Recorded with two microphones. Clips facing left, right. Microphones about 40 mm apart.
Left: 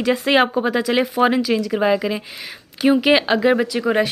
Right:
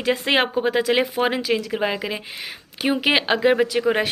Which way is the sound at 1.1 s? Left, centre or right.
Centre.